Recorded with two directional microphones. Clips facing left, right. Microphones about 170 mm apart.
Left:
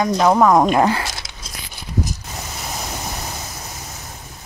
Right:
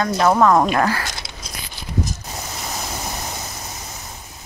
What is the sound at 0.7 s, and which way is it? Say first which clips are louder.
Speech: left 3 dB; 20° left (ahead or behind).